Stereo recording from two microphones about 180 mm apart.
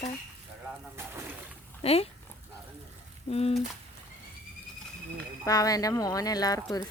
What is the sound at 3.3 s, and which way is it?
Speech, 35° left (ahead or behind).